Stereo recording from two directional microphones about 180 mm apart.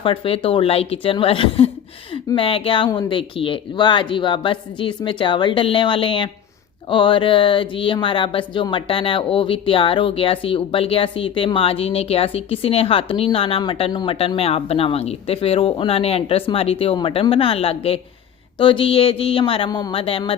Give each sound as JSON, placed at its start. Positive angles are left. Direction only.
{"t": 0.0, "sound": "a woman's voice", "side_deg": 30}